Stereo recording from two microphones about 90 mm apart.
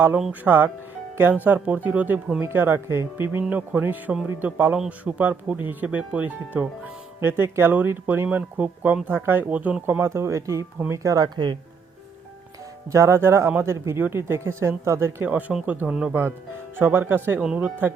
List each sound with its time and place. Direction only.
0.4 s a man's voice: 20° right (ahead or behind); by 11.3 s 40° right (ahead or behind)
12.9 s speech: 30° right (ahead or behind)
15.2 s a man's voice: 15° right (ahead or behind)
17.4 s a man's voice: 10° right (ahead or behind)